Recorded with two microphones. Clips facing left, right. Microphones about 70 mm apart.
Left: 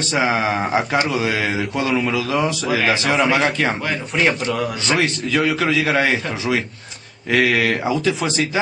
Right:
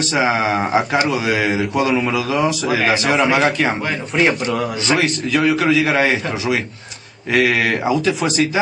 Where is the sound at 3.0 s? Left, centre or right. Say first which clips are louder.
Right 3 dB; centre.